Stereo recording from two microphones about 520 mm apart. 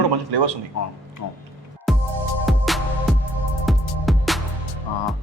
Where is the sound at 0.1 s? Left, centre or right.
Right.